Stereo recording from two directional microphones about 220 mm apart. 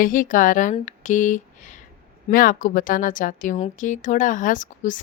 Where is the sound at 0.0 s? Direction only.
40° left (ahead or behind).